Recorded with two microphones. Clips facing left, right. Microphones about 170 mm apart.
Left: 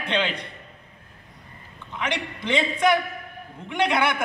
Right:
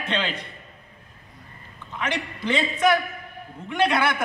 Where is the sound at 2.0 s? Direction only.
15° left (ahead or behind).